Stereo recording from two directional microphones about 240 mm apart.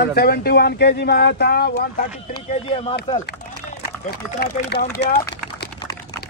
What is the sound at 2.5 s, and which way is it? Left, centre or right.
Speech, left.